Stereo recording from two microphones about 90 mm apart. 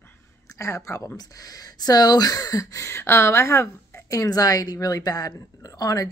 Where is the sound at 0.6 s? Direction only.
35° left (ahead or behind).